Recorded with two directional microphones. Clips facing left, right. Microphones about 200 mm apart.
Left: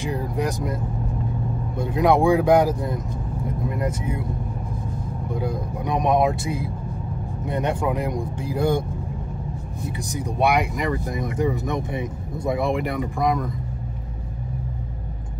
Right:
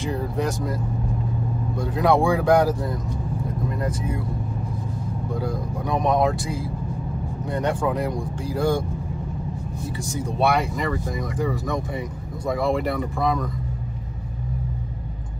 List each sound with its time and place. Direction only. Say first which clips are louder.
0.0 s speech: even; 15° left (ahead or behind)
1.8 s speech: left 1 dB; 20° left (ahead or behind)
5.3 s speech: left 1 dB; 20° left (ahead or behind)
10.1 s speech: left 1 dB; 15° left (ahead or behind)